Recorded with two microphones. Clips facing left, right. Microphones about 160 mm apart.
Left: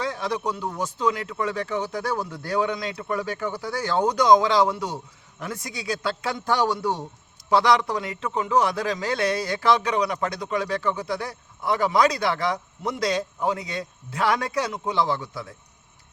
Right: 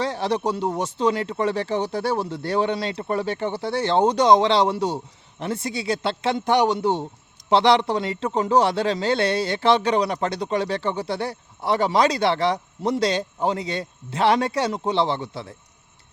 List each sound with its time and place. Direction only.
0.0 s a man's voice: 30° right (ahead or behind)